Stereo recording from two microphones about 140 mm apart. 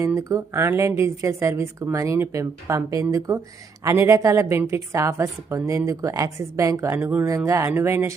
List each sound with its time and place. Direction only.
0.0 s speech: 20° right (ahead or behind)